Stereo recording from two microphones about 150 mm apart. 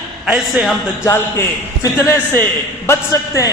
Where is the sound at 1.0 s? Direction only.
20° left (ahead or behind).